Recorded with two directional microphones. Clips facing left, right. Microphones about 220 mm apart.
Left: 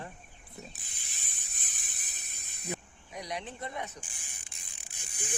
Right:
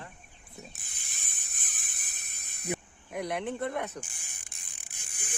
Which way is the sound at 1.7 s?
55° right (ahead or behind).